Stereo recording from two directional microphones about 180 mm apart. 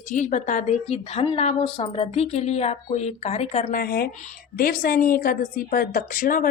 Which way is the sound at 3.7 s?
55° left (ahead or behind).